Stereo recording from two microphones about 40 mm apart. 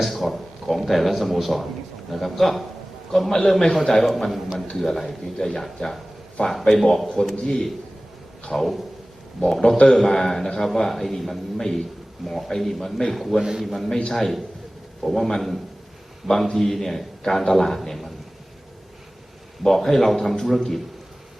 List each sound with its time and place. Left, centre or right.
0.0 s a man's voice: centre
8.5 s a man's voice: centre
9.7 s a man's voice: centre
19.6 s a man's voice: centre